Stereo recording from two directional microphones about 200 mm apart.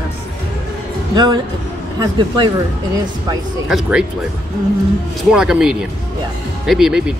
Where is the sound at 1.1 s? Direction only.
20° right (ahead or behind).